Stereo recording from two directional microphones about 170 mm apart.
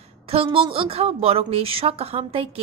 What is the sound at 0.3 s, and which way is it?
A woman's voice, 30° right (ahead or behind).